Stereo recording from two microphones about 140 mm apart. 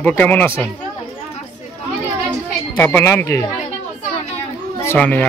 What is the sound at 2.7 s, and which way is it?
Speech, 15° left (ahead or behind).